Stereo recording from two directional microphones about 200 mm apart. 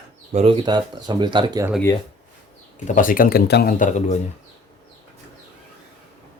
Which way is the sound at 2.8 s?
40° left (ahead or behind).